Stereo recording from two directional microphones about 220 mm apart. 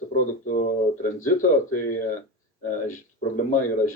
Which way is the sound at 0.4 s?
35° left (ahead or behind).